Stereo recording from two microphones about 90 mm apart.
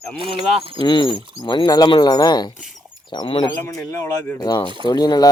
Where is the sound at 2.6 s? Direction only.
Centre (ahead or behind).